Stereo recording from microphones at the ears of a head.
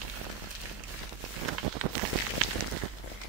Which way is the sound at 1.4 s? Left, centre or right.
Right.